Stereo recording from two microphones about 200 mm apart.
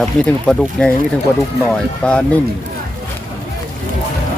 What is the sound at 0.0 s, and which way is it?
Speech, 5° left (ahead or behind).